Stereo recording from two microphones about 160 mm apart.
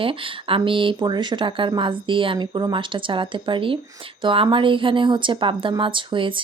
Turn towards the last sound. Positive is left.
turn(degrees=-30)  # may be behind; listen again after turning